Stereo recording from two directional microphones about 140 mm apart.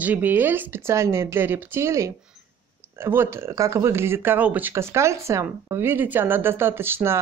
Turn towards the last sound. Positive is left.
turn(degrees=-15)  # may be behind; listen again after turning